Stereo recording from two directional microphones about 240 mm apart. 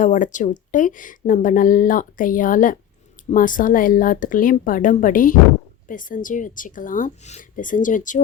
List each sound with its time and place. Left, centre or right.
0.0 s a woman's voice: left